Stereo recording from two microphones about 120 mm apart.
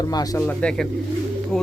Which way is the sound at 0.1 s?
30° left (ahead or behind).